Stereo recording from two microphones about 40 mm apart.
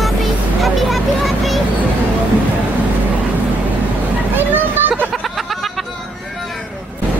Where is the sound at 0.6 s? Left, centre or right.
Centre.